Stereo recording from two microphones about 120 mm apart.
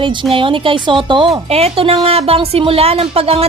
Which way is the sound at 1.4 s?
60° right (ahead or behind).